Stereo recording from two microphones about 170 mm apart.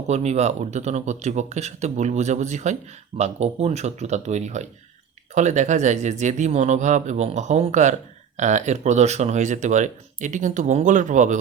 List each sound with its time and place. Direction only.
0.1 s speech: 40° right (ahead or behind)